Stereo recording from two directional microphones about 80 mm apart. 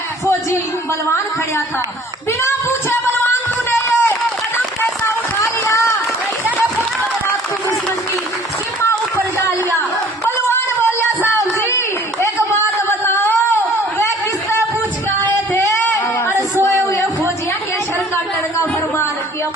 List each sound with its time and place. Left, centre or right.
2.4 s music: left
4.8 s run: left
12.2 s a sound: left
15.5 s singing: left